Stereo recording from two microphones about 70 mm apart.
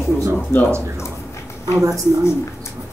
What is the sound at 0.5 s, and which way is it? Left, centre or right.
Speech, left.